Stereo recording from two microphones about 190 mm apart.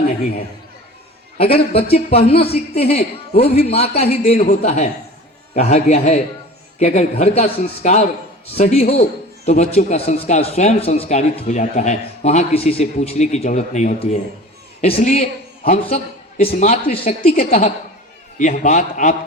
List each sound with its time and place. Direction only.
1.5 s speech: 30° left (ahead or behind)